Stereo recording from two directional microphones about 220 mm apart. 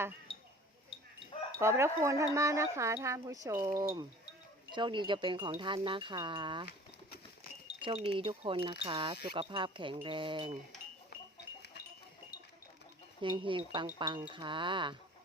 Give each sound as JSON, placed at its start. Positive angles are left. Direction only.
{"t": 1.5, "sound": "speech", "side_deg": -10}
{"t": 7.8, "sound": "speech", "side_deg": -25}
{"t": 13.2, "sound": "speech", "side_deg": -20}